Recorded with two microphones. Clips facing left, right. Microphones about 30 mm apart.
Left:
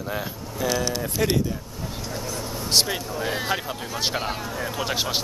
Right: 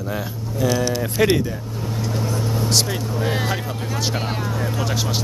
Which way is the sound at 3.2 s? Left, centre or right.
Centre.